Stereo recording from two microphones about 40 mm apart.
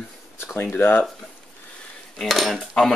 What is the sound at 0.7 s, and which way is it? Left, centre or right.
Speech, left.